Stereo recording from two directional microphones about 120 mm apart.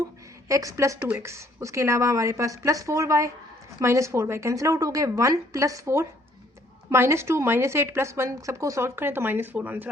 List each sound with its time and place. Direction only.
0.4 s a woman's voice: 25° right (ahead or behind)